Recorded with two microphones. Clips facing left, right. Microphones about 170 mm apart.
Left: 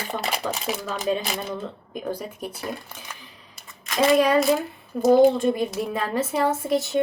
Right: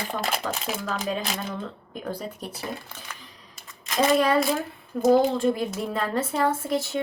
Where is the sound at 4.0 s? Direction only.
10° left (ahead or behind).